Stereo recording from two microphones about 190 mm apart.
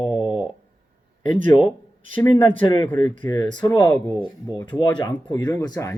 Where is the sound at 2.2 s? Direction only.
25° left (ahead or behind).